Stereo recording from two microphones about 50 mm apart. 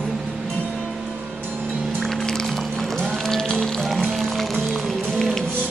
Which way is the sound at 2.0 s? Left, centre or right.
Centre.